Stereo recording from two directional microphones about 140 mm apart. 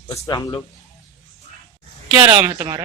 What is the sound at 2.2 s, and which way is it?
Speech, 25° right (ahead or behind).